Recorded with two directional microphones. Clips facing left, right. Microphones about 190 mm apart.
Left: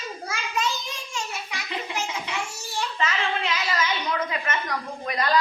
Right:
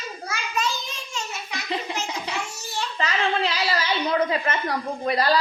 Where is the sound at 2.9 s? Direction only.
35° right (ahead or behind).